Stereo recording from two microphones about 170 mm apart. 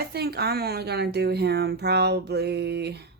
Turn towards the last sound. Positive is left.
turn(degrees=-75)  # may be behind; listen again after turning